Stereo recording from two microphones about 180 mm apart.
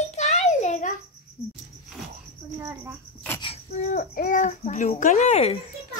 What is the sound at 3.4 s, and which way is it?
Child singing, 35° left (ahead or behind).